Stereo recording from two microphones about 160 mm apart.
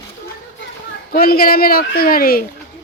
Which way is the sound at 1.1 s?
65° left (ahead or behind).